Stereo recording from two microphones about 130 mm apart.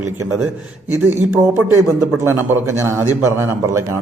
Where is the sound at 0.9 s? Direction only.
15° right (ahead or behind).